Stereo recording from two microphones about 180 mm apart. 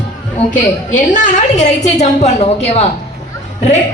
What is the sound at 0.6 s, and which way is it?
A woman's voice, 45° left (ahead or behind).